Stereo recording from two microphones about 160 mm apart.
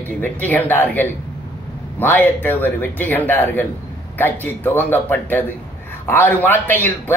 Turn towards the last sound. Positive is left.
turn(degrees=10)  # may be behind; listen again after turning